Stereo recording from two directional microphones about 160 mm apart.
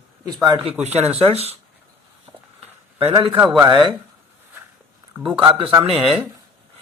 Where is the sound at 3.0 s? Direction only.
30° right (ahead or behind).